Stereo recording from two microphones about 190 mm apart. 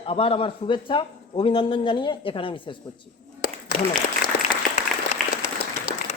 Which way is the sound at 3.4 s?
50° left (ahead or behind).